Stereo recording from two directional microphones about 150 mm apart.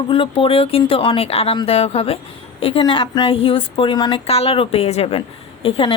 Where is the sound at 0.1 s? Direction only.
35° left (ahead or behind).